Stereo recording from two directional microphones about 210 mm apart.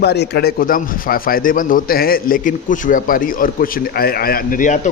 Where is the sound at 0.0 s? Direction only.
50° left (ahead or behind).